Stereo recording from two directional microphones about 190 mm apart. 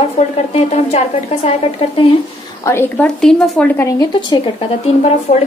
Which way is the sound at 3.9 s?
25° left (ahead or behind).